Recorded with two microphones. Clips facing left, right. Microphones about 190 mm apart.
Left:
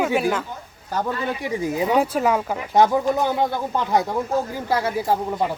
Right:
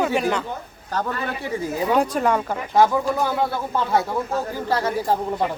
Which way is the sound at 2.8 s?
20° left (ahead or behind).